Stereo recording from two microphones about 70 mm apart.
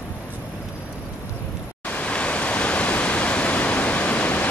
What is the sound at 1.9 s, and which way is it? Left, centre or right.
Pink noise, centre.